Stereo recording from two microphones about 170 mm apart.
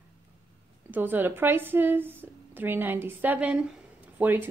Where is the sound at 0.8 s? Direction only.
10° right (ahead or behind).